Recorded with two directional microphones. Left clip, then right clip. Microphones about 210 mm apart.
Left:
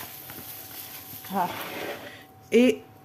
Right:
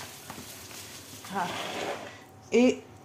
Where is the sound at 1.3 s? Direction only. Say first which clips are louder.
Left 3 dB; 25° left (ahead or behind).